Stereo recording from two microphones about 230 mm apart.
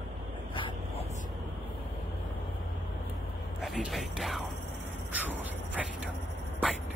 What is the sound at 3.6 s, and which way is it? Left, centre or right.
Music, centre.